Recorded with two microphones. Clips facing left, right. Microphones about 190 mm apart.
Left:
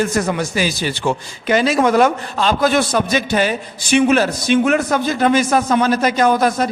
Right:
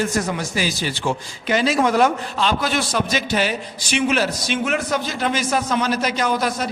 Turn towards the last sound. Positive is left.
turn(degrees=50)  # may be behind; listen again after turning